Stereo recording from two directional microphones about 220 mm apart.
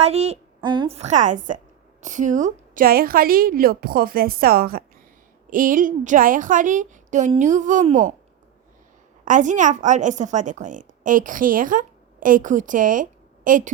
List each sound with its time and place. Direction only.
0.0 s speech: 30° right (ahead or behind)
9.2 s a woman's voice: 35° right (ahead or behind)